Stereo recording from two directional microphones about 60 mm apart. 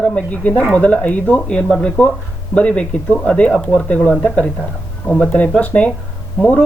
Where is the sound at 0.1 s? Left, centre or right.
Left.